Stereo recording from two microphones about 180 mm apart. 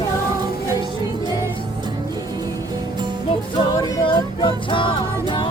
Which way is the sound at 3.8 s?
20° left (ahead or behind).